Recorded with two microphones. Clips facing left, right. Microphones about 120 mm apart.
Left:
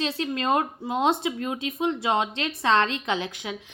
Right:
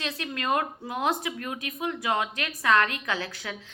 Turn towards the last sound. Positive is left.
turn(degrees=20)  # may be behind; listen again after turning